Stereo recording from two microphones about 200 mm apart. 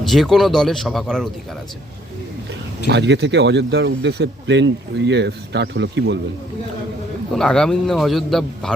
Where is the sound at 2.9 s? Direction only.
60° right (ahead or behind).